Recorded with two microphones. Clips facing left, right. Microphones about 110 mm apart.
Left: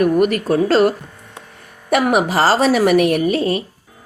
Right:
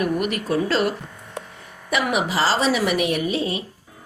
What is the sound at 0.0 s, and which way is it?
A woman's voice, 45° left (ahead or behind).